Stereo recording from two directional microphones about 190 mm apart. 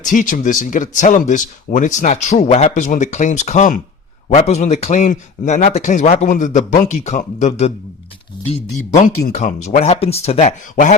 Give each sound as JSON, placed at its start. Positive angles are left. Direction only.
{"t": 0.0, "sound": "speech", "side_deg": 45}
{"t": 9.3, "sound": "speech", "side_deg": 35}